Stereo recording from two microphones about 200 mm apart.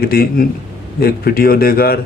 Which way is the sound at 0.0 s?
50° left (ahead or behind).